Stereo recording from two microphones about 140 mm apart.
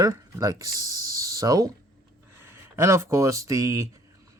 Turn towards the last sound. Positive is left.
turn(degrees=-20)  # may be behind; listen again after turning